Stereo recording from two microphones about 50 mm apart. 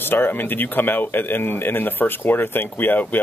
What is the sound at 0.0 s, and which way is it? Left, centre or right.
Speech, left.